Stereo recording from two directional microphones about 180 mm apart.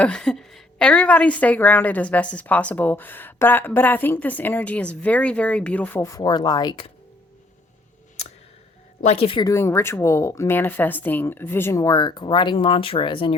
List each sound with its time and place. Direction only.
0.0 s a woman's voice: 5° left (ahead or behind); by 6.9 s 25° left (ahead or behind)
9.0 s speech: 30° left (ahead or behind)
9.5 s a woman's voice: 15° left (ahead or behind)